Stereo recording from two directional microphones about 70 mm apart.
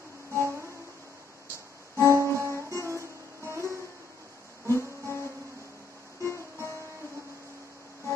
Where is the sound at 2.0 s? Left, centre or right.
Right.